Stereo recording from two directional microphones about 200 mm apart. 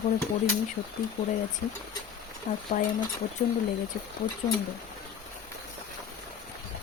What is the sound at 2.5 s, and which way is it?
Speech, 35° left (ahead or behind).